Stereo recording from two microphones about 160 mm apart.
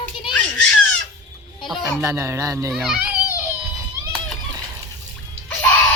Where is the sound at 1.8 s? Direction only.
20° right (ahead or behind).